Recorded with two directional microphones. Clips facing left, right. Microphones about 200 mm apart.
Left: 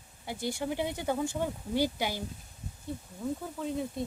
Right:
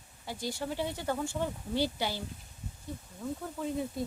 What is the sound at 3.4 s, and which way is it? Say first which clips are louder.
Speech: even; centre (ahead or behind).